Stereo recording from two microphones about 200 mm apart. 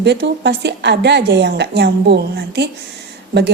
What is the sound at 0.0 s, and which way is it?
Speech, 60° right (ahead or behind).